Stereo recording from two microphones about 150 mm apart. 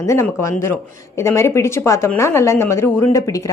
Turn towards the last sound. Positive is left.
turn(degrees=20)  # may be behind; listen again after turning